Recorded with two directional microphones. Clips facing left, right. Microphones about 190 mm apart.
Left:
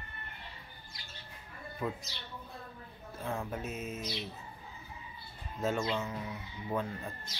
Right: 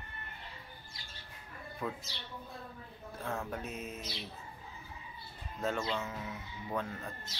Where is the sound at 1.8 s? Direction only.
5° left (ahead or behind).